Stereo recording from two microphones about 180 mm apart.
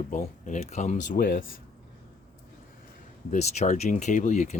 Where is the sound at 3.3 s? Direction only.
40° left (ahead or behind).